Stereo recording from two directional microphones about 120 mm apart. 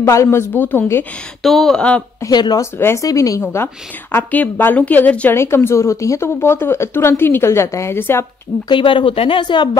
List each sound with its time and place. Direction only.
0.0 s a woman's voice: 20° left (ahead or behind)
1.4 s speech: centre (ahead or behind)
2.2 s speech: 35° left (ahead or behind)
2.6 s a woman's voice: 25° left (ahead or behind)
8.6 s speech: 45° left (ahead or behind)